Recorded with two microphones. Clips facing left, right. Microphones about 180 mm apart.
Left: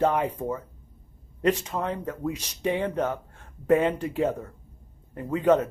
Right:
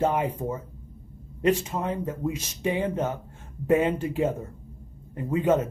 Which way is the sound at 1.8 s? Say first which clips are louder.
Right 1 dB; 15° right (ahead or behind).